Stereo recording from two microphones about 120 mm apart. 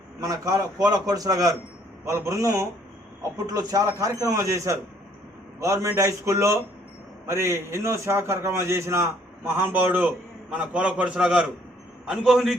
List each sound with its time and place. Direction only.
0.2 s a man's voice: 30° right (ahead or behind); by 12.5 s 5° right (ahead or behind)